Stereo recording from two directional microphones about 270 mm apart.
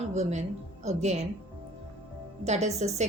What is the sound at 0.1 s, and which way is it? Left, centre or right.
A woman's voice, right.